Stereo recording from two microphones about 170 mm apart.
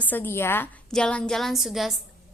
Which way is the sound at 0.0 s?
10° left (ahead or behind).